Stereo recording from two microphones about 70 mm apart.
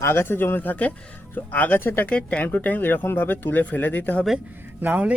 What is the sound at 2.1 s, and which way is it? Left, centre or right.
Speech, centre.